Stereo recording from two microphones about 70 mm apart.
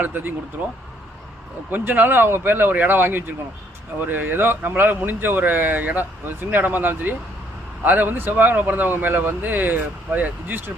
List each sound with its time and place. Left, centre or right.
0.0 s speech: right
1.7 s speech: right